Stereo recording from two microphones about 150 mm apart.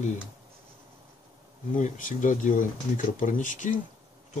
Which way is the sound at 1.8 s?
60° left (ahead or behind).